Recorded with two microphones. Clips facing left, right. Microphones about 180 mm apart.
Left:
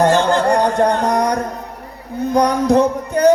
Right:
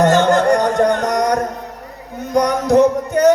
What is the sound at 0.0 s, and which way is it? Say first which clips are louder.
Music: right 1 dB; 30° left (ahead or behind).